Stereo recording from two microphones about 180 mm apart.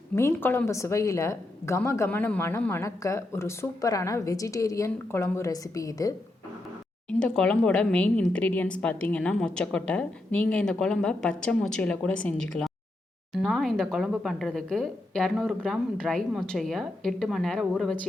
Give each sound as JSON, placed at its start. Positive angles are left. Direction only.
{"t": 0.2, "sound": "a woman's voice", "side_deg": 15}
{"t": 7.1, "sound": "a woman's voice", "side_deg": 5}